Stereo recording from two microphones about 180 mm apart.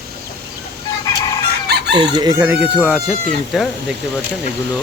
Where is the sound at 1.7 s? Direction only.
65° right (ahead or behind).